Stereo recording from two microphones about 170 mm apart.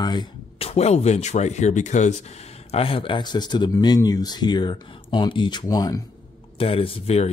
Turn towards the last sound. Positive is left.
turn(degrees=35)  # may be behind; listen again after turning